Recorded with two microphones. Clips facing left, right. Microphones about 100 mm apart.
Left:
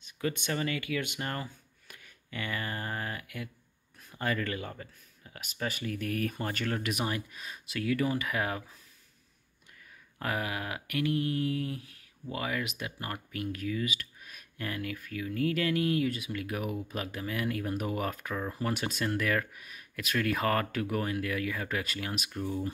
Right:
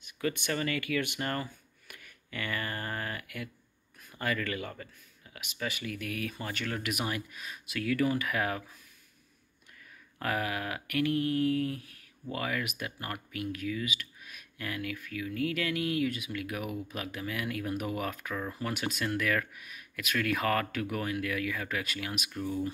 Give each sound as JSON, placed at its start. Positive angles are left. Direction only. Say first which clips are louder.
{"t": 0.0, "sound": "speech", "louder": "right 1 dB", "side_deg": 20}
{"t": 5.3, "sound": "speech", "louder": "left 1 dB", "side_deg": 40}
{"t": 10.1, "sound": "speech", "louder": "right 1 dB", "side_deg": 20}
{"t": 13.3, "sound": "speech", "louder": "even", "side_deg": 35}
{"t": 22.3, "sound": "speech", "louder": "right 1 dB", "side_deg": 20}